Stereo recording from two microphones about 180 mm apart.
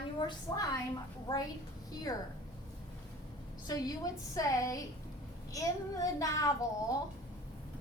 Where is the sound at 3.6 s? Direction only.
20° left (ahead or behind).